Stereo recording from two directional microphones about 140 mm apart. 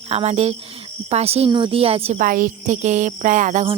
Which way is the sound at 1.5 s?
35° right (ahead or behind).